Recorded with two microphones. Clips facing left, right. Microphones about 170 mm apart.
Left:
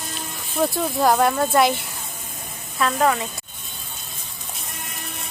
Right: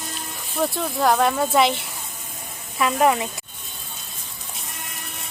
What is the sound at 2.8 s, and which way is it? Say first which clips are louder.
Speech: right 1 dB; 15° right (ahead or behind).